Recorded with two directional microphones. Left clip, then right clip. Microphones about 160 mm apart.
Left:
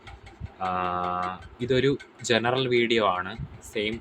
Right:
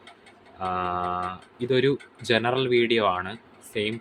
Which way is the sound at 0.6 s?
Centre (ahead or behind).